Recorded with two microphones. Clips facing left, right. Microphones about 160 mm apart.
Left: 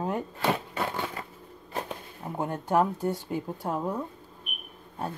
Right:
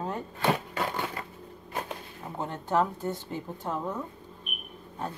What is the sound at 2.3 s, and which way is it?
Speech, 10° left (ahead or behind).